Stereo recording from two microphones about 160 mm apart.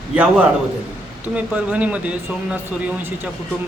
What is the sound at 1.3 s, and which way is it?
Speech, 10° right (ahead or behind).